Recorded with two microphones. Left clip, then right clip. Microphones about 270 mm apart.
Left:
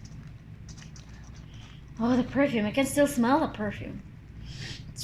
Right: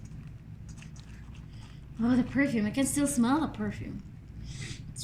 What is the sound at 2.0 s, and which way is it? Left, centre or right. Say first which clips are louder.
A woman's voice: left 3 dB; centre.